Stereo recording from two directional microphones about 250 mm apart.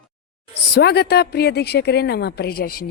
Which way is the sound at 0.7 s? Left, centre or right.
Left.